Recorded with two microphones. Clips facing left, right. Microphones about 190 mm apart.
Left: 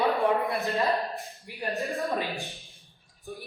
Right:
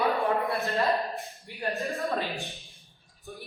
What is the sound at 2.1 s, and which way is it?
Speech, 15° left (ahead or behind).